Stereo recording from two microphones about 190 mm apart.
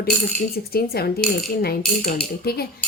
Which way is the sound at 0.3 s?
55° left (ahead or behind).